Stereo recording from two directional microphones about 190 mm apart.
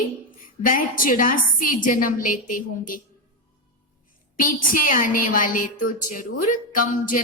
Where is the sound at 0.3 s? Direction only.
45° left (ahead or behind).